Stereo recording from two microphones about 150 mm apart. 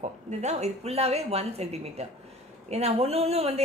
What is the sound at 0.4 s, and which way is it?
A woman's voice, 50° right (ahead or behind).